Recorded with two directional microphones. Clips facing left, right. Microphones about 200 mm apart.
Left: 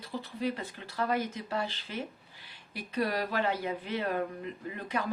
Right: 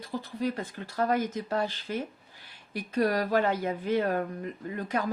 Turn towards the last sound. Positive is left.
turn(degrees=-45)  # may be behind; listen again after turning